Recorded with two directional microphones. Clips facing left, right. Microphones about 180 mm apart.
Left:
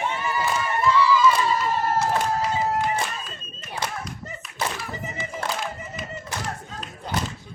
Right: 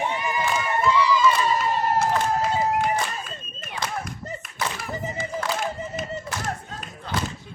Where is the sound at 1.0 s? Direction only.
15° right (ahead or behind).